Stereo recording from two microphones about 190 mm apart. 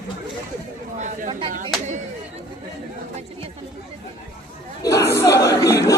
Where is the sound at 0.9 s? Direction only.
40° right (ahead or behind).